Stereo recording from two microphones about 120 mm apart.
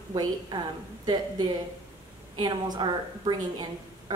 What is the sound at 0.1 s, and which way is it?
Speech, 35° right (ahead or behind).